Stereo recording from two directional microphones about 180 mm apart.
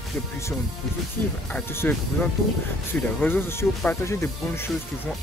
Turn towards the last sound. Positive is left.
turn(degrees=15)  # may be behind; listen again after turning